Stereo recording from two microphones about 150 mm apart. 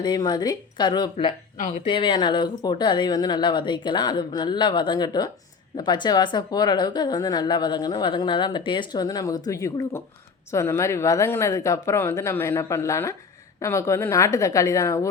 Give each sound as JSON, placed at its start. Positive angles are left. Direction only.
{"t": 0.0, "sound": "speech", "side_deg": 30}